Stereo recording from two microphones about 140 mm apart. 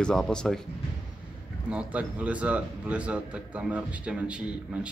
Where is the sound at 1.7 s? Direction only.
10° right (ahead or behind).